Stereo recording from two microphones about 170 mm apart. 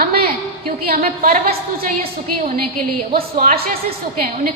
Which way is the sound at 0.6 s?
60° right (ahead or behind).